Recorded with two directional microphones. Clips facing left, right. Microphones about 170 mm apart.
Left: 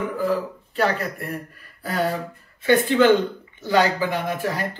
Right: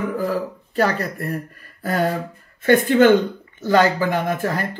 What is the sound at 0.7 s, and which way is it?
Speech, 40° right (ahead or behind).